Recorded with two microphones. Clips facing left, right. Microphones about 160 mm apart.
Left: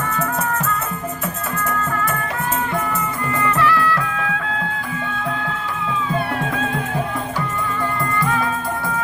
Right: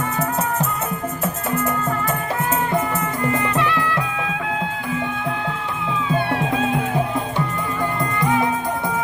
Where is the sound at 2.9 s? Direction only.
20° right (ahead or behind).